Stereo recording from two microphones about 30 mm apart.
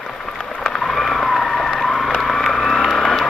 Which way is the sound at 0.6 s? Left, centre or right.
Centre.